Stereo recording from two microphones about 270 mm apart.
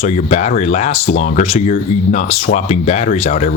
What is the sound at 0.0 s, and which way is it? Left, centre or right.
Speech, left.